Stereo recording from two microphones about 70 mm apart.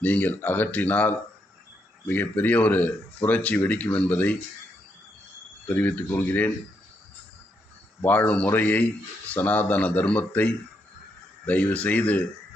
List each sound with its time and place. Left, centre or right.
0.0 s speech: left
5.6 s speech: left
8.0 s speech: left